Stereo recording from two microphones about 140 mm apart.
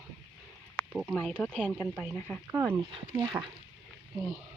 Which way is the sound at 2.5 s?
15° right (ahead or behind).